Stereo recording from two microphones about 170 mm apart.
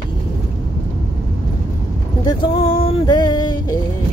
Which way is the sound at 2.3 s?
30° left (ahead or behind).